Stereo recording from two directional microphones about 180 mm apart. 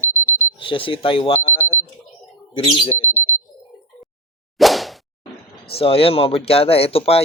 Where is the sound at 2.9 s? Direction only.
10° left (ahead or behind).